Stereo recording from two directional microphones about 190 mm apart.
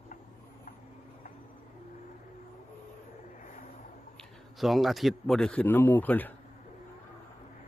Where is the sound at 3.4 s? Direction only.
45° left (ahead or behind).